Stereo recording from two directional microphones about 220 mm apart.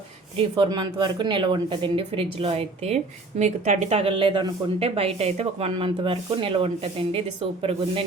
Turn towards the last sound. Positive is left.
turn(degrees=-25)  # may be behind; listen again after turning